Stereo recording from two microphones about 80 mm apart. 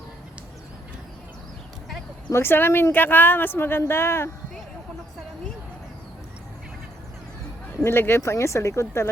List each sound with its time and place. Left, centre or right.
2.3 s a woman's voice: left
7.9 s speech: left